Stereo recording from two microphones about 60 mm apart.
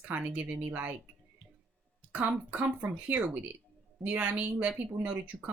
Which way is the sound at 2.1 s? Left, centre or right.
Right.